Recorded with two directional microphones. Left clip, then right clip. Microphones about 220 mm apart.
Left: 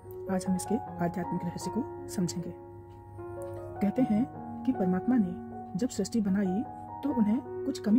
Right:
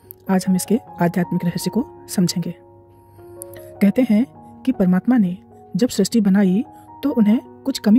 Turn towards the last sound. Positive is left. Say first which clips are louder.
# right 11 dB
turn(degrees=-35)  # may be behind; listen again after turning